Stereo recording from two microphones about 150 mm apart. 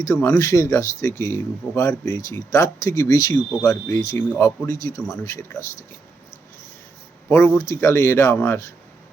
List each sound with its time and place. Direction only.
0.0 s speech: 15° left (ahead or behind)
7.3 s speech: 15° left (ahead or behind)